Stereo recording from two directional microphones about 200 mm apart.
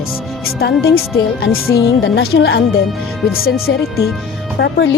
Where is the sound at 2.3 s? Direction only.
70° left (ahead or behind).